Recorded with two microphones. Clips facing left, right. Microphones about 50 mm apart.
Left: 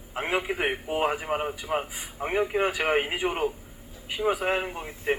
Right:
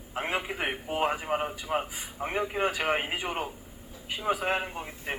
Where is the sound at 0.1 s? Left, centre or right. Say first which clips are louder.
Left 3 dB; left.